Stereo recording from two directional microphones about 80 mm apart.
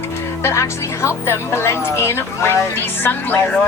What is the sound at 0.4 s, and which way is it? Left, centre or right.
A woman's voice, left.